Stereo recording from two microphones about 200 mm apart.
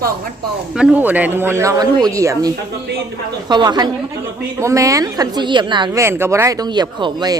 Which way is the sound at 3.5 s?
20° right (ahead or behind).